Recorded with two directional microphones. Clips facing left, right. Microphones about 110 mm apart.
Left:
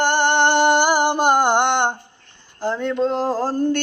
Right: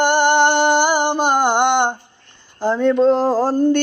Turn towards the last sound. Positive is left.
turn(degrees=-15)  # may be behind; listen again after turning